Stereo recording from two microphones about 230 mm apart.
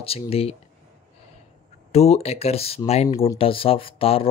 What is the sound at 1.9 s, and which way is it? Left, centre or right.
Speech, left.